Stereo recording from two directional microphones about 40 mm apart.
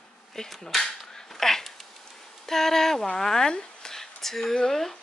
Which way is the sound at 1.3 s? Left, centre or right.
Centre.